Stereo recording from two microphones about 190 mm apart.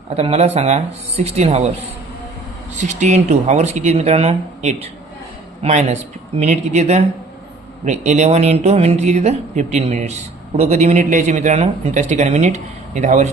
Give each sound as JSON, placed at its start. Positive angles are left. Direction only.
{"t": 0.2, "sound": "speech", "side_deg": -35}
{"t": 2.7, "sound": "speech", "side_deg": -40}